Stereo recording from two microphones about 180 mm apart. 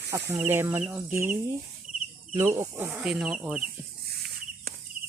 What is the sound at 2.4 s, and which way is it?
Speech, 15° right (ahead or behind).